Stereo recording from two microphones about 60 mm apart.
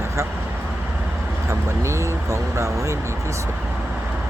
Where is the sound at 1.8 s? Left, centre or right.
Right.